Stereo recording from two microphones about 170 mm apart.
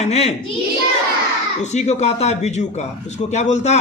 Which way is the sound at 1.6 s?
40° left (ahead or behind).